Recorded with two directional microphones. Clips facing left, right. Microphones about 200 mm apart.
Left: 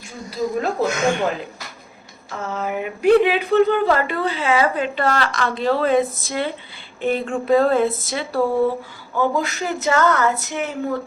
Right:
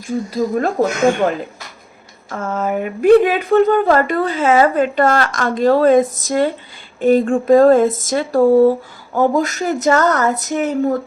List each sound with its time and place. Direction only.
0.3 s speech: 50° right (ahead or behind)
2.3 s speech: 50° right (ahead or behind)